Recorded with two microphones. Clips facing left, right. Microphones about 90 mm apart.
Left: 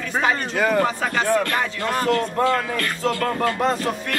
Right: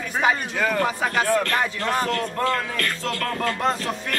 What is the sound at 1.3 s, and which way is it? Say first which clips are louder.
Speech: left 3 dB; 10° left (ahead or behind).